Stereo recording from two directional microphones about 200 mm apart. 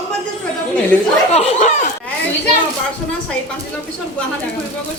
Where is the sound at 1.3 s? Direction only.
35° left (ahead or behind).